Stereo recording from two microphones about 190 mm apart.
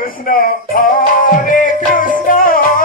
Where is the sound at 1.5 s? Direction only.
45° left (ahead or behind).